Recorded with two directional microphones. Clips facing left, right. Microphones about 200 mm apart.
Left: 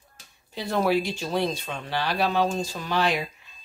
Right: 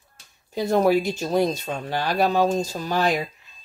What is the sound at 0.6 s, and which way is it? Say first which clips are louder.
Speech: right 5 dB; 45° right (ahead or behind).